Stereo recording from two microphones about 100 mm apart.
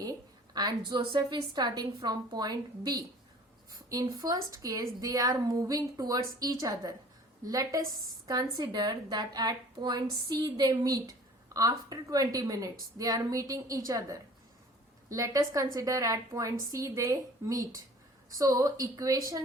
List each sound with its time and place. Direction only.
0.0 s a woman's voice: 40° right (ahead or behind)